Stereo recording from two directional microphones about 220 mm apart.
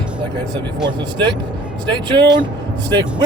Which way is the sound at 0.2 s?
20° right (ahead or behind).